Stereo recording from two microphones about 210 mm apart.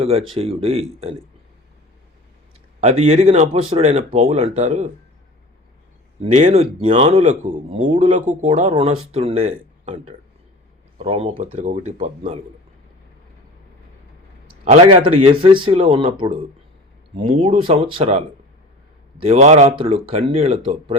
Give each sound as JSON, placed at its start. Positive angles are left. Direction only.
{"t": 0.3, "sound": "speech", "side_deg": -30}
{"t": 2.8, "sound": "a man's voice", "side_deg": -30}
{"t": 6.3, "sound": "a man's voice", "side_deg": -30}
{"t": 14.6, "sound": "speech", "side_deg": -30}
{"t": 19.3, "sound": "speech", "side_deg": -35}